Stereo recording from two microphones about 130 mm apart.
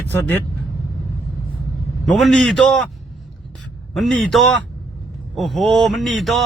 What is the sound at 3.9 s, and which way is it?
Speech, centre (ahead or behind).